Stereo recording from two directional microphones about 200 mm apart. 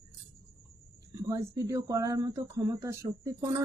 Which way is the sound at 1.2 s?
15° right (ahead or behind).